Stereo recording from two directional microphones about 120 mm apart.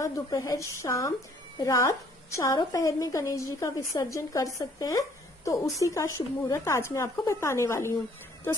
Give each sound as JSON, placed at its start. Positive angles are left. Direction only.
{"t": 0.0, "sound": "a woman's voice", "side_deg": 25}